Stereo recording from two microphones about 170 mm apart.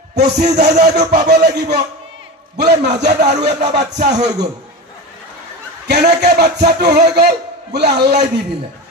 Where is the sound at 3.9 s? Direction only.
40° right (ahead or behind).